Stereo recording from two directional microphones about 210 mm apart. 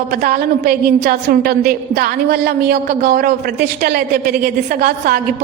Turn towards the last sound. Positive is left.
turn(degrees=-45)  # may be behind; listen again after turning